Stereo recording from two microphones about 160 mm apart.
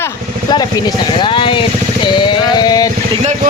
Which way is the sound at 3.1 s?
40° right (ahead or behind).